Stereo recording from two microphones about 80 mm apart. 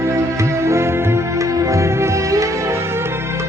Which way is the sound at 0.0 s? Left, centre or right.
Right.